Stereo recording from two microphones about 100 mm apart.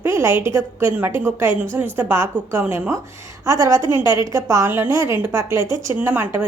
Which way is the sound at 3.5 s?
30° right (ahead or behind).